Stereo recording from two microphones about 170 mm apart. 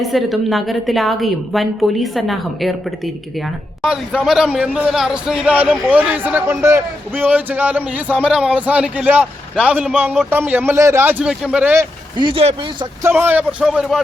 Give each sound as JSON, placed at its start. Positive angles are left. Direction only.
{"t": 0.0, "sound": "a woman's voice", "side_deg": 0}
{"t": 3.8, "sound": "a man's voice", "side_deg": -5}
{"t": 12.1, "sound": "speech", "side_deg": -30}
{"t": 13.0, "sound": "a man's voice", "side_deg": -10}